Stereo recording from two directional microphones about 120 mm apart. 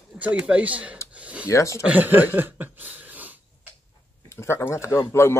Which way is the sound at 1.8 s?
15° right (ahead or behind).